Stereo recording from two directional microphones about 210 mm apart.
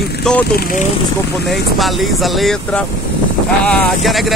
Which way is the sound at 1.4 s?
Centre (ahead or behind).